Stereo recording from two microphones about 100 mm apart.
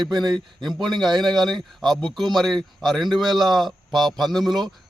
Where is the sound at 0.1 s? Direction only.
45° right (ahead or behind).